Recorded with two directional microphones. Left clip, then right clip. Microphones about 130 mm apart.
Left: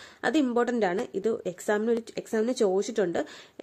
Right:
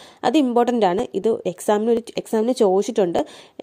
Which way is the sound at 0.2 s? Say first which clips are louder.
Right 8 dB; 45° right (ahead or behind).